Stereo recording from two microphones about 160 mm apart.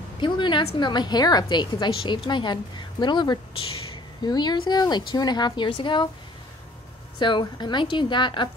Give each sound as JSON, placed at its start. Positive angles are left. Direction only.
{"t": 0.2, "sound": "a sound", "side_deg": 30}
{"t": 0.7, "sound": "a woman's voice", "side_deg": 30}
{"t": 7.2, "sound": "a woman's voice", "side_deg": 30}